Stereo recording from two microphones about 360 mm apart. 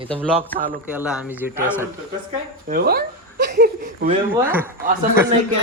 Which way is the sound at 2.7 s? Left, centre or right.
Right.